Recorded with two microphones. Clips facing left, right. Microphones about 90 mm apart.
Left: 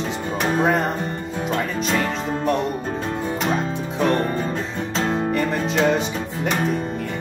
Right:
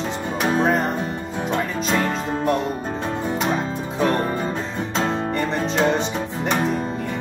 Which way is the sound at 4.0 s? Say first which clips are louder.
Left 1 dB; 5° right (ahead or behind).